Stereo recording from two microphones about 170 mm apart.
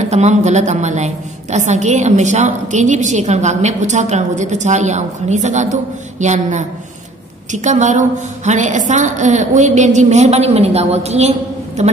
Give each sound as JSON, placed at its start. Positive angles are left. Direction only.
{"t": 0.1, "sound": "a woman's voice", "side_deg": -40}